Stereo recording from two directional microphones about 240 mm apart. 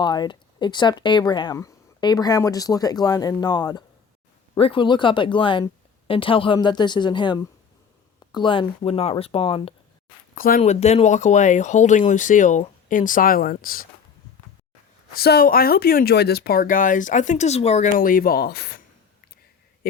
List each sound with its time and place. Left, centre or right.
0.0 s speech: centre
10.3 s speech: left
15.1 s speech: left
19.8 s speech: left